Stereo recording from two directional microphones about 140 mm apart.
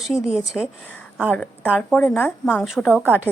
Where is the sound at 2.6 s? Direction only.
Centre (ahead or behind).